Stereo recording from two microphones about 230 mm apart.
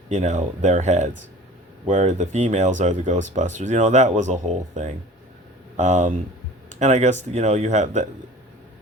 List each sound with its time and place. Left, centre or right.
0.1 s speech: right